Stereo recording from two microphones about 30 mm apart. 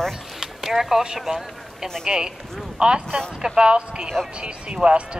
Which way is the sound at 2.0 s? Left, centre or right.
Right.